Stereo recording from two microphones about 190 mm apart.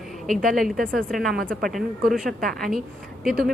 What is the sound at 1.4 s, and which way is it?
Speech, 50° right (ahead or behind).